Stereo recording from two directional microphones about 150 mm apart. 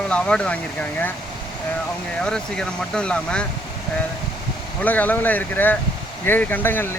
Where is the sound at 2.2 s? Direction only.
5° left (ahead or behind).